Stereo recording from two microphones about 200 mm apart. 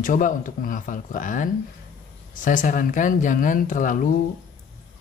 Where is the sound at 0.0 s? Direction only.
40° left (ahead or behind).